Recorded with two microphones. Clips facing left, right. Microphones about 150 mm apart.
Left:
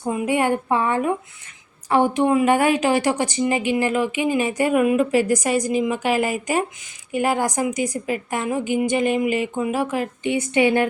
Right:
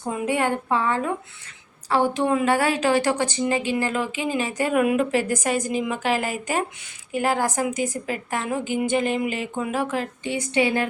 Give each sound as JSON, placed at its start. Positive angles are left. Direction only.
{"t": 0.1, "sound": "speech", "side_deg": 15}
{"t": 4.7, "sound": "a woman's voice", "side_deg": 0}
{"t": 5.4, "sound": "speech", "side_deg": 10}